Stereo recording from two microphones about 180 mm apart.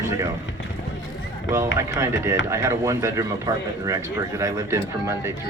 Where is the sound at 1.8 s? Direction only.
15° right (ahead or behind).